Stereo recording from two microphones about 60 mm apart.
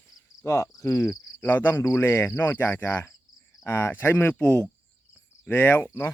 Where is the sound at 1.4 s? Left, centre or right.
Left.